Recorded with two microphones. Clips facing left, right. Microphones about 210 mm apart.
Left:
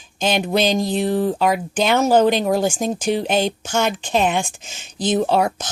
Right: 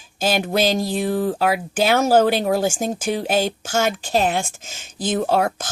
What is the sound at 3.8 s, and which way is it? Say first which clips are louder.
Speech: left 1 dB; 40° right (ahead or behind).